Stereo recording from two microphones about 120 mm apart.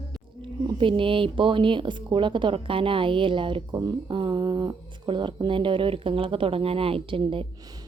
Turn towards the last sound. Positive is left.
turn(degrees=-50)  # may be behind; listen again after turning